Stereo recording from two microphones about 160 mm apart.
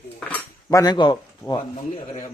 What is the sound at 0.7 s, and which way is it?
Speech, 25° left (ahead or behind).